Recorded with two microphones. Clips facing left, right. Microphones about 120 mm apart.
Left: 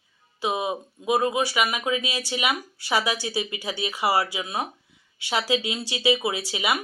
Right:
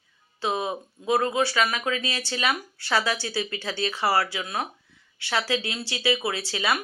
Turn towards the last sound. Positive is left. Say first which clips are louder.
# even
turn(degrees=15)  # may be behind; listen again after turning